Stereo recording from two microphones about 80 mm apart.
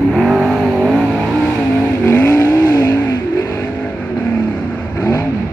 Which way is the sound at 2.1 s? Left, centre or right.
Left.